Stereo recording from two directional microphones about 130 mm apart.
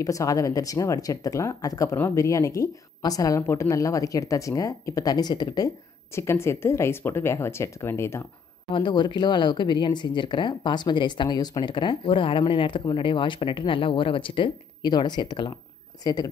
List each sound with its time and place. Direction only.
0.0 s a woman's voice: 25° left (ahead or behind)
6.1 s a woman's voice: 20° left (ahead or behind)
8.7 s speech: 35° left (ahead or behind)